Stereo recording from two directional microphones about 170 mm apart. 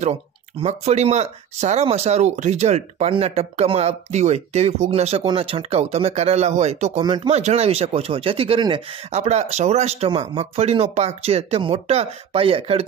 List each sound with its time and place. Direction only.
0.6 s speech: 40° right (ahead or behind)
7.0 s speech: 25° right (ahead or behind)
7.3 s speech: 40° right (ahead or behind)
9.1 s speech: 40° right (ahead or behind)